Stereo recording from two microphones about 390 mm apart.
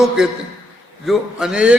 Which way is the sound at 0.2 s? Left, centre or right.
Centre.